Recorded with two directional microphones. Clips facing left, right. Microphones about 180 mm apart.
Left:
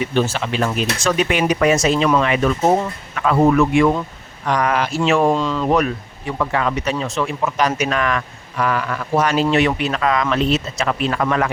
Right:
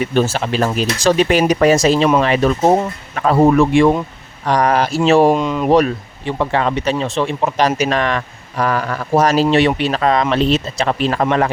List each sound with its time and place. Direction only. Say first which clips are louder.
0.1 s speech: right 3 dB; 40° right (ahead or behind)
5.3 s speech: right 3 dB; 15° right (ahead or behind)
5.7 s speech: right 5 dB; 30° right (ahead or behind)